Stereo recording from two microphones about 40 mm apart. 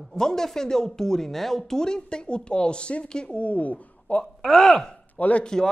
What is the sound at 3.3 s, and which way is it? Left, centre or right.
Speech, left.